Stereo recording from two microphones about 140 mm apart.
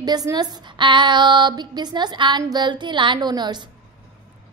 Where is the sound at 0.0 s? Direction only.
30° right (ahead or behind).